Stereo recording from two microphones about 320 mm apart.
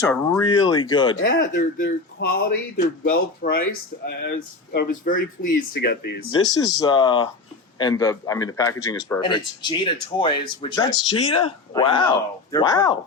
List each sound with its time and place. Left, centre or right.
0.1 s a man's voice: centre
1.1 s speech: left
6.3 s a man's voice: centre